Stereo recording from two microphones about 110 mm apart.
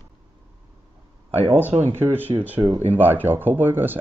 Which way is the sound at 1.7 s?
70° right (ahead or behind).